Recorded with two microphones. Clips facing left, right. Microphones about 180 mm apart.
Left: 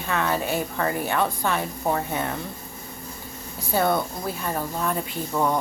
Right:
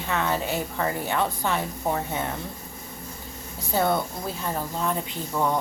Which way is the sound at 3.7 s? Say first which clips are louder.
Left 1 dB; 20° right (ahead or behind).